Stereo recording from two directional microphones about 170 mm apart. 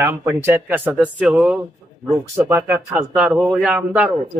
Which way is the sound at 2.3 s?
15° right (ahead or behind).